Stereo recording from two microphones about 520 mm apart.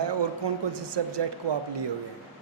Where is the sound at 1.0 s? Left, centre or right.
Right.